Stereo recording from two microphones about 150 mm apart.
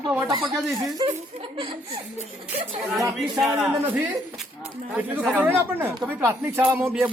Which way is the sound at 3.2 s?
Centre (ahead or behind).